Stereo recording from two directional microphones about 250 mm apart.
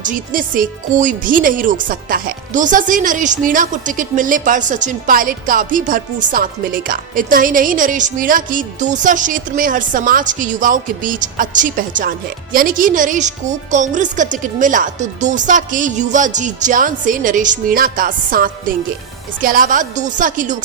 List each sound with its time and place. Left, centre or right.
0.0 s speech: right